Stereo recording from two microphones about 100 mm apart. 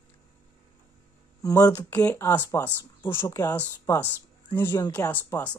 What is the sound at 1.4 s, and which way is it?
Speech, 35° left (ahead or behind).